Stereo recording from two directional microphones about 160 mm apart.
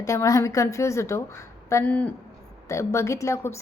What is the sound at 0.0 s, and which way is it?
A woman's voice, 20° left (ahead or behind).